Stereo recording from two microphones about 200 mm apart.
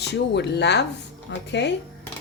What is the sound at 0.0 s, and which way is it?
A woman's voice, 55° left (ahead or behind).